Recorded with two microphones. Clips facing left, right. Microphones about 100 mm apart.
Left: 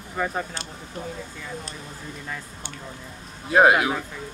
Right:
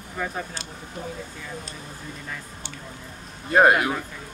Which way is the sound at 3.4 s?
Centre (ahead or behind).